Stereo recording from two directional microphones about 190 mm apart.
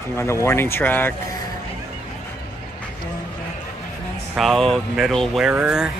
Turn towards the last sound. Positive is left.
turn(degrees=-5)  # may be behind; listen again after turning